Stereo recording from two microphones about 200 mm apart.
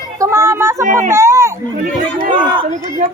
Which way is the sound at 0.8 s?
40° right (ahead or behind).